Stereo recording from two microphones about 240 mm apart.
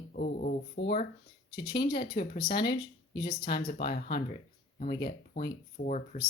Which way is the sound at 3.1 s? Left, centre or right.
Centre.